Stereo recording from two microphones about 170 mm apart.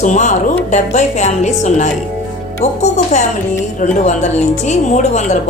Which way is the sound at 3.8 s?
45° left (ahead or behind).